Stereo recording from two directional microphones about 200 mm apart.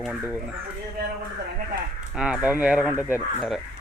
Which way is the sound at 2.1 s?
5° right (ahead or behind).